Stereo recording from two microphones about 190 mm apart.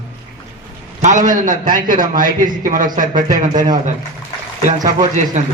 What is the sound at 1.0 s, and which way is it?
A man's voice, 40° right (ahead or behind).